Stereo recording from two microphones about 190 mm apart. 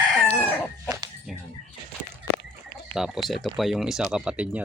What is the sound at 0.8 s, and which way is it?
Dog, 20° right (ahead or behind).